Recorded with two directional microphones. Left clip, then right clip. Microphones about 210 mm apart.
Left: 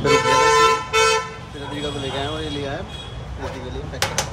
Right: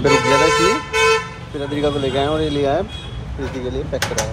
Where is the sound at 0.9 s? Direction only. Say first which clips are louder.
Right 2 dB; 50° left (ahead or behind).